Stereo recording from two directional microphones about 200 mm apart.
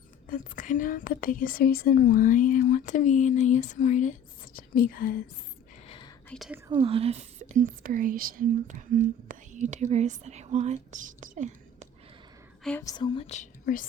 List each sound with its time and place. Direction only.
0.3 s speech: 40° left (ahead or behind)
5.9 s whispering: 25° left (ahead or behind)
6.2 s speech: 5° left (ahead or behind)
6.7 s speech: 25° right (ahead or behind)
12.8 s speech: 20° left (ahead or behind); by 13.8 s 40° left (ahead or behind)